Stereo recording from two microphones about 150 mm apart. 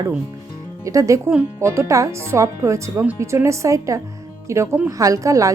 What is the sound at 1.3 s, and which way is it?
Speech, 5° right (ahead or behind).